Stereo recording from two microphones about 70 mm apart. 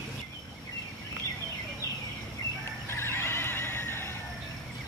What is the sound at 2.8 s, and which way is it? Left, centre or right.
Neigh, left.